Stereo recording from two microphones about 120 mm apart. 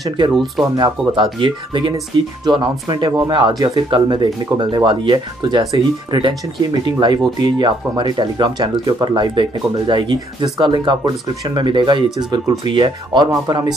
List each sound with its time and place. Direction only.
0.3 s speech: 5° right (ahead or behind)
0.7 s speech: 40° right (ahead or behind)
3.1 s speech: 25° right (ahead or behind)